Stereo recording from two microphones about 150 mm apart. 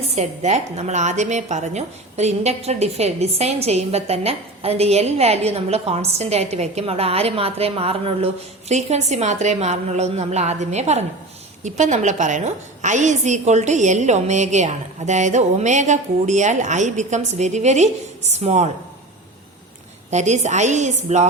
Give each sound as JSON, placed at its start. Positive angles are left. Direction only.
{"t": 0.2, "sound": "a woman's voice", "side_deg": -50}
{"t": 20.1, "sound": "a woman's voice", "side_deg": -50}